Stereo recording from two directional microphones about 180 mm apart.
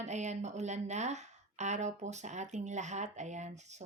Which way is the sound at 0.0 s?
40° right (ahead or behind).